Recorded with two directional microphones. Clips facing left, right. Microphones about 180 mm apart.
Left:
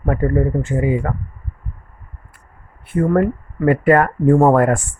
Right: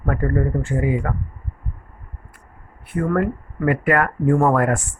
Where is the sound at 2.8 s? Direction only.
25° left (ahead or behind).